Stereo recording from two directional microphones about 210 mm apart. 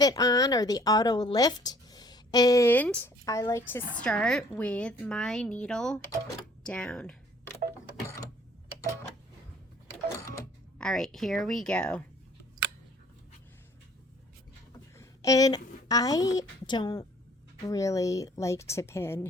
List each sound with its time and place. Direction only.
0.0 s a woman's voice: 15° left (ahead or behind)
10.2 s a sound: 15° left (ahead or behind)
10.8 s speech: centre (ahead or behind)
14.9 s a woman's voice: 15° left (ahead or behind)